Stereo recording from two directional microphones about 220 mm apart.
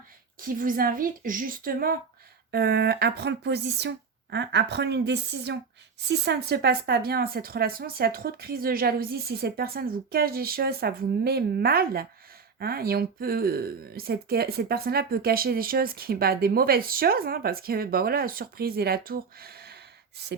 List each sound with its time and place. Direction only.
0.4 s a woman's voice: 40° right (ahead or behind)